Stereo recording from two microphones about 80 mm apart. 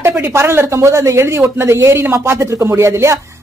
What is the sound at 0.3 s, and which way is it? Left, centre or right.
A woman's voice, right.